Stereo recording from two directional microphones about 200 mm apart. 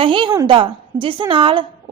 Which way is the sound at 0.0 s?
25° right (ahead or behind).